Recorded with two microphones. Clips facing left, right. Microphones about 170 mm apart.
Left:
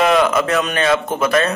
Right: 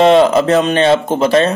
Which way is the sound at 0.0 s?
30° right (ahead or behind).